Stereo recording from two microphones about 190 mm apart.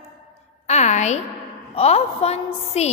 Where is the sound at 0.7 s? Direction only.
35° left (ahead or behind).